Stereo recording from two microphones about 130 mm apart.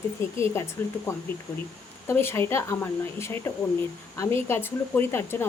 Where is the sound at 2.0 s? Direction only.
20° left (ahead or behind).